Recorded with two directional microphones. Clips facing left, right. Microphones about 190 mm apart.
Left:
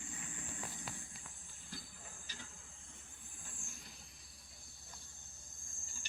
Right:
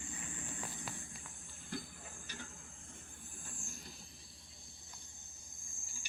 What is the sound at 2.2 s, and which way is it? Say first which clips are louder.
Cricket: right 7 dB; 55° right (ahead or behind).